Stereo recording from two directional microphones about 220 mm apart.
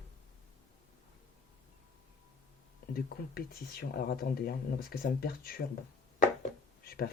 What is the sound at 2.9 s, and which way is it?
Speech, 45° left (ahead or behind).